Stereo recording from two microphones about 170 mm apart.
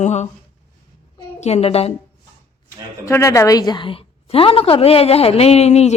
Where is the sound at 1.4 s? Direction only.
40° left (ahead or behind).